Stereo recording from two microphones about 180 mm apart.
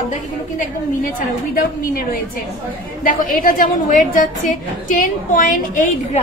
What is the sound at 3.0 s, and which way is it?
A woman's voice, 50° left (ahead or behind).